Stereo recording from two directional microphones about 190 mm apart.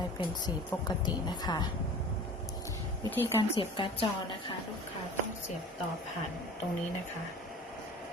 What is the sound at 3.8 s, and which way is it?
Speech, 25° left (ahead or behind).